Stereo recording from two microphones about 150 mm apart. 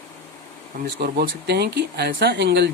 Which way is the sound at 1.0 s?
90° right.